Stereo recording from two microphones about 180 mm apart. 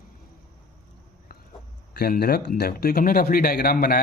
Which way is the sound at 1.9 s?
60° left (ahead or behind).